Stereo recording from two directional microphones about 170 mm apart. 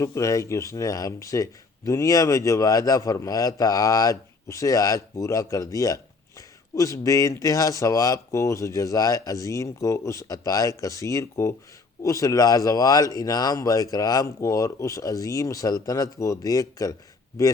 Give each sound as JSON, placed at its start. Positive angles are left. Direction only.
{"t": 0.0, "sound": "speech", "side_deg": 20}